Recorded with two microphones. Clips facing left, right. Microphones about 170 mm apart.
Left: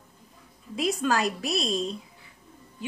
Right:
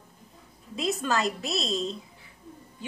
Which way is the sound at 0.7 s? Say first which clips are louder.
Left 2 dB; 20° right (ahead or behind).